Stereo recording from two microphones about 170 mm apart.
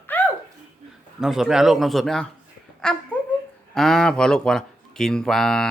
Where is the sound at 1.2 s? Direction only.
Centre (ahead or behind).